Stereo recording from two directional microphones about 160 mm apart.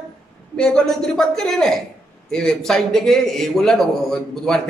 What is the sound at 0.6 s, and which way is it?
Speech, 5° left (ahead or behind).